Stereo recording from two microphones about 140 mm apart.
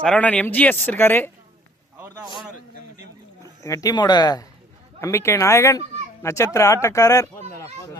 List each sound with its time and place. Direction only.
0.0 s speech: 10° left (ahead or behind)
3.4 s speech: 25° left (ahead or behind)
4.9 s speech: 20° left (ahead or behind)